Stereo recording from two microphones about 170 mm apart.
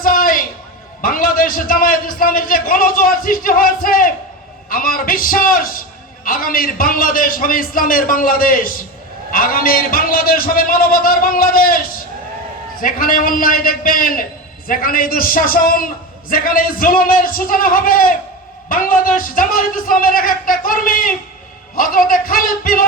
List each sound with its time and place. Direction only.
0.0 s music: 55° left (ahead or behind)
1.0 s a man's voice: 55° left (ahead or behind)
12.8 s a man's voice: 55° left (ahead or behind)